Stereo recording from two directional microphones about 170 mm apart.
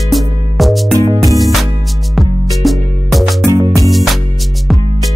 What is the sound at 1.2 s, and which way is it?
Music, centre (ahead or behind).